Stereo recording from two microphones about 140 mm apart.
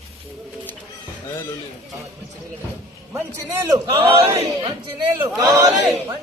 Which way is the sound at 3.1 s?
20° right (ahead or behind).